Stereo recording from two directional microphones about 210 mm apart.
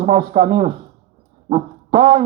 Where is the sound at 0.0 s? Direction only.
40° right (ahead or behind).